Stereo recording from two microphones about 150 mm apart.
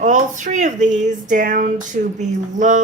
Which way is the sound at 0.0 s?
55° right (ahead or behind).